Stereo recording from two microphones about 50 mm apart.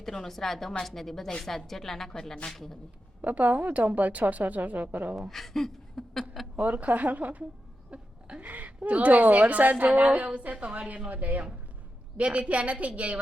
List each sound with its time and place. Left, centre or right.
0.0 s a woman's voice: centre
3.2 s a woman's voice: right
5.3 s speech: centre
6.6 s a woman's voice: right